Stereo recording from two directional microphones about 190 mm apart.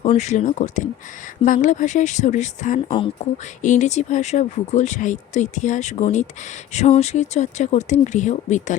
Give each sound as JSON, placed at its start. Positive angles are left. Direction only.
{"t": 0.0, "sound": "speech", "side_deg": 35}